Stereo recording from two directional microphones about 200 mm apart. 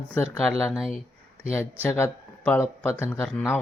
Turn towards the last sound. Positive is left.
turn(degrees=10)  # may be behind; listen again after turning